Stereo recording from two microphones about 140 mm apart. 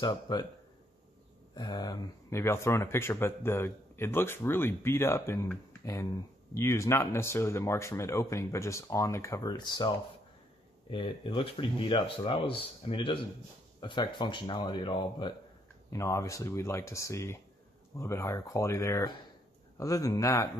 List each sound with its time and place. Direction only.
0.0 s speech: 30° left (ahead or behind)
1.5 s speech: 30° left (ahead or behind)
2.4 s a man's voice: 20° left (ahead or behind); by 15.3 s 35° left (ahead or behind)
15.9 s speech: 20° left (ahead or behind)